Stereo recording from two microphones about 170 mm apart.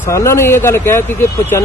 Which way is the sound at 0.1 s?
15° left (ahead or behind).